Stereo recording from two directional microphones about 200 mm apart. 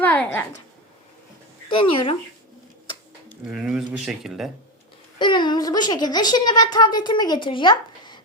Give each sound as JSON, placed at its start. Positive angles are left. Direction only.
{"t": 0.0, "sound": "a woman's voice", "side_deg": 5}
{"t": 1.7, "sound": "a woman's voice", "side_deg": 25}
{"t": 3.5, "sound": "speech", "side_deg": -5}
{"t": 5.2, "sound": "a woman's voice", "side_deg": 25}